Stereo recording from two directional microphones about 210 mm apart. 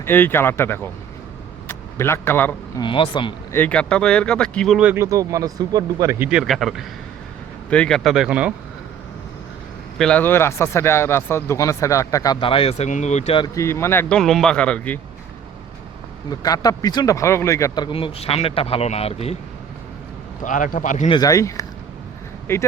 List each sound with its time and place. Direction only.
0.0 s speech: 10° left (ahead or behind)
2.8 s speech: 25° left (ahead or behind)
3.5 s speech: 5° left (ahead or behind)
10.0 s speech: 5° left (ahead or behind); by 13.5 s 25° left (ahead or behind)
13.6 s speech: 15° left (ahead or behind)
16.3 s speech: 15° left (ahead or behind)
20.4 s a man's voice: 40° left (ahead or behind)
21.1 s speech: 15° left (ahead or behind)